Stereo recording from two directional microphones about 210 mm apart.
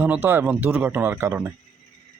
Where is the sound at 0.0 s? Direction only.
10° right (ahead or behind).